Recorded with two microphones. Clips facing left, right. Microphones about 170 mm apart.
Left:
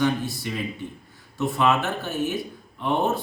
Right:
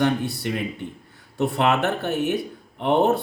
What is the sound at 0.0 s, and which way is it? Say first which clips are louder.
Speech: right 2 dB; 65° right (ahead or behind).